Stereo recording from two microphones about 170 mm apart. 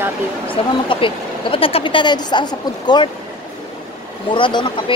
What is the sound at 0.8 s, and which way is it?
Speech, 30° left (ahead or behind).